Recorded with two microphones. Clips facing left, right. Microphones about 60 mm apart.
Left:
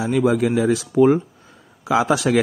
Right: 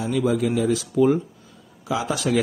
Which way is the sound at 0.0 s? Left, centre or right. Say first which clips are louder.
Left 4 dB; left.